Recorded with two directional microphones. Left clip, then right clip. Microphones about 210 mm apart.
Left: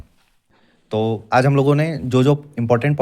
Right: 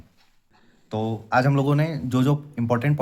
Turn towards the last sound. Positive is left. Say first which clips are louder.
# left 6 dB
turn(degrees=25)  # may be behind; listen again after turning